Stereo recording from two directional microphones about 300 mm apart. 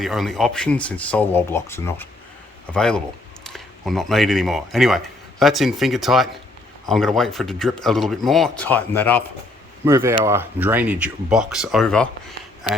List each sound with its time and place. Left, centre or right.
0.0 s speech: centre
9.8 s speech: centre